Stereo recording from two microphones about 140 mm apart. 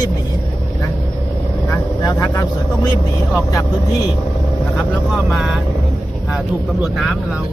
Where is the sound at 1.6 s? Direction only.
25° left (ahead or behind).